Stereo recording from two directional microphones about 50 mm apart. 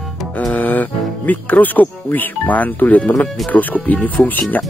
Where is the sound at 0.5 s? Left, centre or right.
Left.